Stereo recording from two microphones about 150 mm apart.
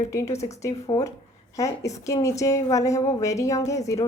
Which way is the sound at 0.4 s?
20° left (ahead or behind).